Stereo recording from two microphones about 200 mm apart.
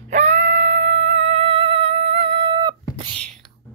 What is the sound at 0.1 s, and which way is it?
Music, 35° right (ahead or behind).